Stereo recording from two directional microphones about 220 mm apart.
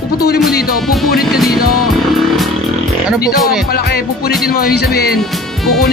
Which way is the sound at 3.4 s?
Centre (ahead or behind).